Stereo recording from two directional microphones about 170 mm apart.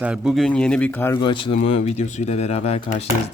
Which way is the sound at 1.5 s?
40° left (ahead or behind).